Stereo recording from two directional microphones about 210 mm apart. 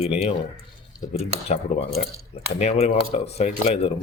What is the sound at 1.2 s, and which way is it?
A man's voice, 30° left (ahead or behind).